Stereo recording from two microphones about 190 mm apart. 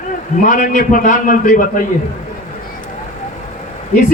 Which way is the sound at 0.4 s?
45° left (ahead or behind).